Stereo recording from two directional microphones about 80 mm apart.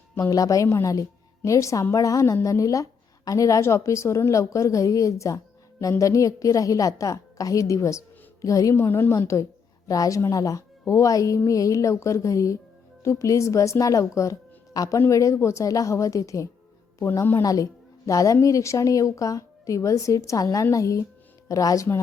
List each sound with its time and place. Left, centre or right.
0.2 s a woman's voice: left
8.7 s a woman's voice: left
9.1 s a woman's voice: left